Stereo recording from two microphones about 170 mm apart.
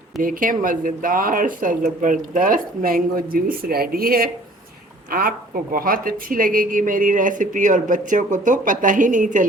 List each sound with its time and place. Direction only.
0.2 s speech: 55° right (ahead or behind)